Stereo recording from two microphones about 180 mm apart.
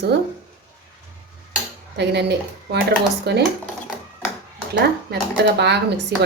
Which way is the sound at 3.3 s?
65° right (ahead or behind).